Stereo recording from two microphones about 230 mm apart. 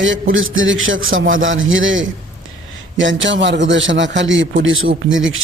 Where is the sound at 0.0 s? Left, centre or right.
Right.